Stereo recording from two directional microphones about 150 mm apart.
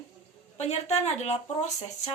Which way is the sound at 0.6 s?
45° left (ahead or behind).